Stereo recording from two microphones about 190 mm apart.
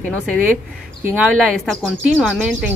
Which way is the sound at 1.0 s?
5° right (ahead or behind).